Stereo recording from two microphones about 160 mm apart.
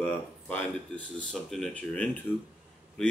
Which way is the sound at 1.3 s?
5° left (ahead or behind).